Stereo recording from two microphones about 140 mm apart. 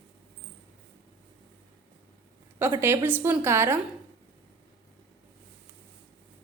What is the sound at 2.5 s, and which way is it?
A woman's voice, 15° right (ahead or behind).